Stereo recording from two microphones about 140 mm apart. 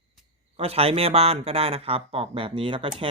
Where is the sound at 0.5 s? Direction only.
45° right (ahead or behind).